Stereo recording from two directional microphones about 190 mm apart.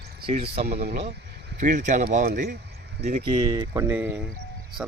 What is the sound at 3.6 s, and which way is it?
Speech, 15° right (ahead or behind).